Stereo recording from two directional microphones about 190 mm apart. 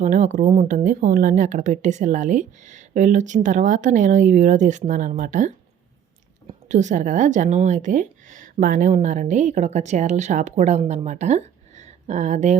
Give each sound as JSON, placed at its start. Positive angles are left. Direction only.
{"t": 0.0, "sound": "speech", "side_deg": -40}
{"t": 6.5, "sound": "speech", "side_deg": -40}